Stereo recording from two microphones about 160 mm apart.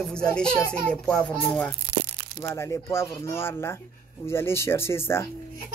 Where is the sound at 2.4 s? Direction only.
15° left (ahead or behind).